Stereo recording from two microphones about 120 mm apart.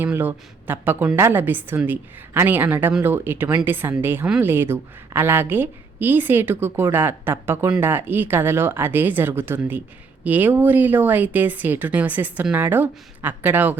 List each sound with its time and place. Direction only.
0.0 s speech: 15° right (ahead or behind)